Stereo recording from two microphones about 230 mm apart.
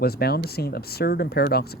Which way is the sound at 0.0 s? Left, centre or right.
Left.